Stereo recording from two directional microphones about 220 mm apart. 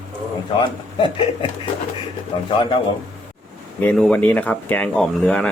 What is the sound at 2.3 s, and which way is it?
Speech, 25° left (ahead or behind).